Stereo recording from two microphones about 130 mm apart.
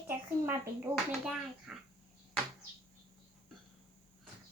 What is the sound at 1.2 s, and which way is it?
Speech, 5° right (ahead or behind).